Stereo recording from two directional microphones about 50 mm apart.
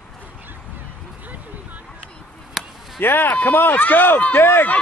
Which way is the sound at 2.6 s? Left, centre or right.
Centre.